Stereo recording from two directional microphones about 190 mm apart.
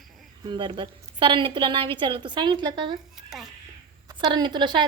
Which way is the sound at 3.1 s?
Centre (ahead or behind).